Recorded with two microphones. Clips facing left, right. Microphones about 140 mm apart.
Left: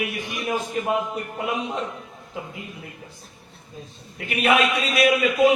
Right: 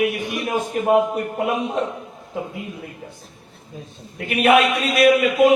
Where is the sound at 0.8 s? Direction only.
50° right (ahead or behind).